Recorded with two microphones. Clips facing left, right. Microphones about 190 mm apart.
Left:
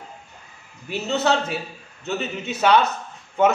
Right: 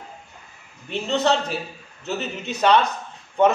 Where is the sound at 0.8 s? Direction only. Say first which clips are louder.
Right 1 dB; 5° left (ahead or behind).